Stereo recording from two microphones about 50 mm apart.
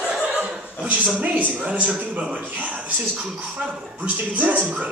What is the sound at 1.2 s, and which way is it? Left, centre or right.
A woman's voice, right.